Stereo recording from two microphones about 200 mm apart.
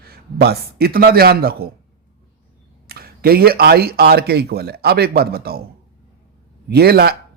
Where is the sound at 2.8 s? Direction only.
50° right (ahead or behind).